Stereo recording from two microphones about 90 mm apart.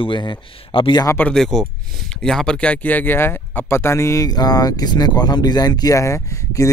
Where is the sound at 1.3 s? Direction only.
5° left (ahead or behind).